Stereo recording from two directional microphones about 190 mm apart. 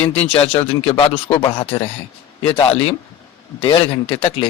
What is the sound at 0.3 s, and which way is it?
A man's voice, 30° left (ahead or behind).